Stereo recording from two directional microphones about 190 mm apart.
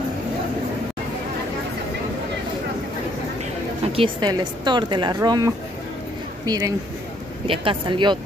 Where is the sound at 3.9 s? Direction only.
25° right (ahead or behind).